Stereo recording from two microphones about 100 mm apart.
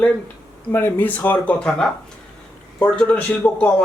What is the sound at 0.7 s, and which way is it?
A man's voice, 20° left (ahead or behind).